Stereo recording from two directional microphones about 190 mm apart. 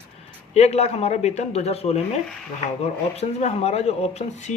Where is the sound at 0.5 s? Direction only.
35° left (ahead or behind).